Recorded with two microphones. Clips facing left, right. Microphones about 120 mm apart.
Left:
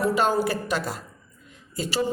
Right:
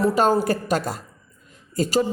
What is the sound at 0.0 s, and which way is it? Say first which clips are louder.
A woman's voice: right 3 dB; 40° right (ahead or behind).